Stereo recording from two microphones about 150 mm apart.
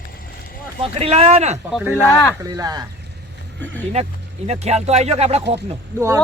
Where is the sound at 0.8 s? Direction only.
40° right (ahead or behind).